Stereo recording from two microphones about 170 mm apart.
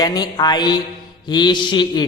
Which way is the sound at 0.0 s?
25° left (ahead or behind).